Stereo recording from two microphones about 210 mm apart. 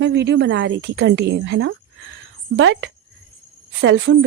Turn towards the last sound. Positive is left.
turn(degrees=-60)  # may be behind; listen again after turning